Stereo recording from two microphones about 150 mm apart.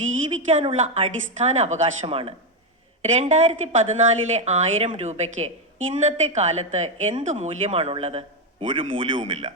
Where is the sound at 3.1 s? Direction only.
50° right (ahead or behind).